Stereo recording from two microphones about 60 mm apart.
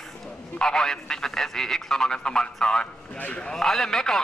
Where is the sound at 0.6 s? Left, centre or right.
Centre.